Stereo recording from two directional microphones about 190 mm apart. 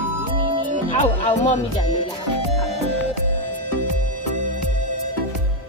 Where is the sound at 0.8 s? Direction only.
40° left (ahead or behind).